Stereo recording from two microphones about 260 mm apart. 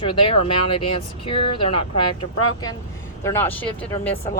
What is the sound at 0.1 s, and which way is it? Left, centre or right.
Speech, centre.